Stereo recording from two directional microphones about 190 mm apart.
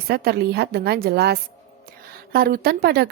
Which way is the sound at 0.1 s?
55° right (ahead or behind).